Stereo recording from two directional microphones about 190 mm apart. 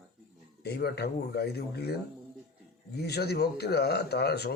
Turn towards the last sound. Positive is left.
turn(degrees=60)  # may be behind; listen again after turning